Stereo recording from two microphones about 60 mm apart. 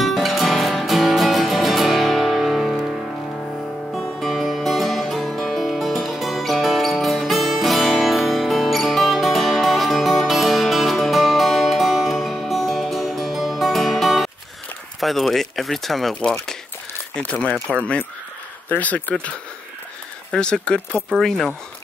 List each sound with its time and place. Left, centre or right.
0.0 s music: centre
3.9 s music: centre
15.0 s speech: centre
17.2 s speech: centre
20.2 s speech: centre